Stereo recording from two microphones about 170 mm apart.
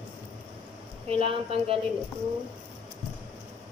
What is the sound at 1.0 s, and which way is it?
Speech, 35° right (ahead or behind).